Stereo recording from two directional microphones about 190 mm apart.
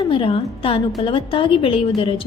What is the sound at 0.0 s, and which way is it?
A woman's voice, 25° left (ahead or behind).